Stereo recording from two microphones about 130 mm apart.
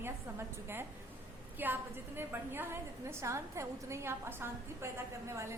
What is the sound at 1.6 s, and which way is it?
A woman's voice, 15° right (ahead or behind).